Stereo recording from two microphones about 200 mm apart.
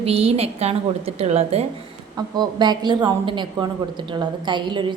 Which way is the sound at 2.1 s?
20° right (ahead or behind).